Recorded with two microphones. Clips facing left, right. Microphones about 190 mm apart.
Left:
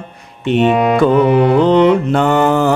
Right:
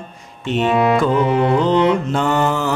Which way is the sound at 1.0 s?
70° left (ahead or behind).